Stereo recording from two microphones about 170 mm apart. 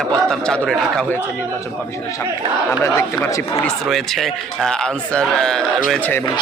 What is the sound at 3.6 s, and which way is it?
Speech, centre (ahead or behind).